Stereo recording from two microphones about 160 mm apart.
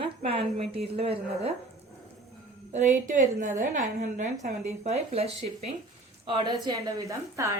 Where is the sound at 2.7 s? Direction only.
55° right (ahead or behind); by 6.6 s 30° right (ahead or behind).